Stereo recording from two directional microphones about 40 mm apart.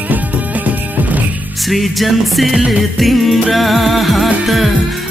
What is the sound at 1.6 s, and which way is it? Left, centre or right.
Music, centre.